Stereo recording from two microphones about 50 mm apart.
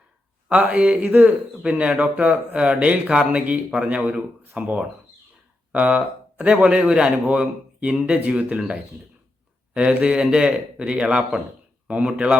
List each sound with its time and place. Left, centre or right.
0.5 s speech: right
7.3 s speech: right
10.0 s speech: right